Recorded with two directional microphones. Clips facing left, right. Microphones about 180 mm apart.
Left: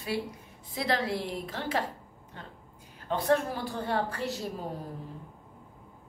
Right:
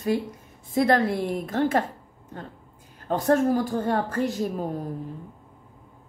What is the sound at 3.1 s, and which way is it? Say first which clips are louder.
A woman's voice: right 6 dB; 45° right (ahead or behind).